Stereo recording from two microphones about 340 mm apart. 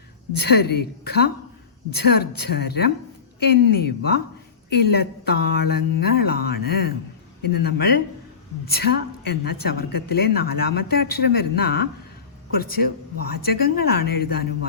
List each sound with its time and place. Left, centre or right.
0.4 s a woman's voice: left